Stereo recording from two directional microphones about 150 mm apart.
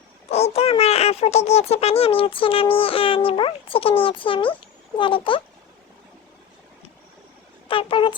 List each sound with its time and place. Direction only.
0.3 s speech: 45° left (ahead or behind)
7.7 s speech: 35° left (ahead or behind)